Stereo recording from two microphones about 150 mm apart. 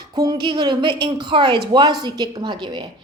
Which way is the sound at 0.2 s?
30° right (ahead or behind).